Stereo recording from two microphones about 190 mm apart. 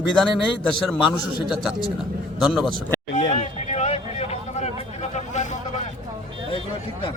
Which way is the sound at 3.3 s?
35° left (ahead or behind).